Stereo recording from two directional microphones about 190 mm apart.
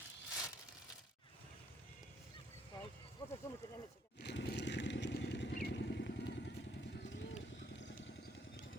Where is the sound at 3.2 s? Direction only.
15° left (ahead or behind).